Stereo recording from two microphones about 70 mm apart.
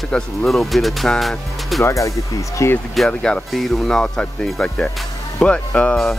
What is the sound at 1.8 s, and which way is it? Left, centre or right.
Speech, left.